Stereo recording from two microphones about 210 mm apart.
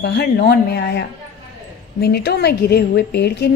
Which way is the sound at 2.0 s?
50° left (ahead or behind).